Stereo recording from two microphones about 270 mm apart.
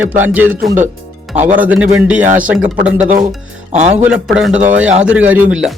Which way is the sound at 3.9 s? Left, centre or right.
Centre.